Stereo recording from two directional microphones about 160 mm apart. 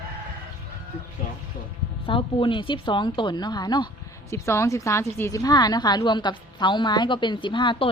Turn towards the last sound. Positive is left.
turn(degrees=30)  # may be behind; listen again after turning